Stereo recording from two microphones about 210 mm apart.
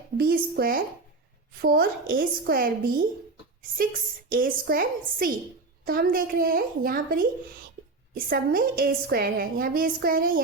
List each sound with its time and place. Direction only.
0.2 s a woman's voice: 45° right (ahead or behind)
4.3 s a woman's voice: 40° right (ahead or behind)